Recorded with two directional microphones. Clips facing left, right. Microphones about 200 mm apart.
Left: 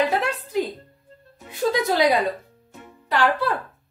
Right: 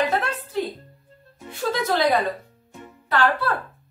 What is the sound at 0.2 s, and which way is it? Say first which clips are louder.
Music: left 2 dB; 15° left (ahead or behind).